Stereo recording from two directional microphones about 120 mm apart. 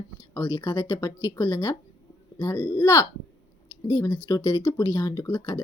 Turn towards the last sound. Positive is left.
turn(degrees=25)  # may be behind; listen again after turning